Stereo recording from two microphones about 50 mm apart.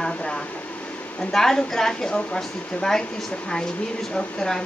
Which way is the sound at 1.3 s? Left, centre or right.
Centre.